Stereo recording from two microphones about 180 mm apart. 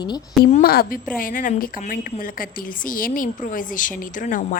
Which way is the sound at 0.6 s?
55° left (ahead or behind).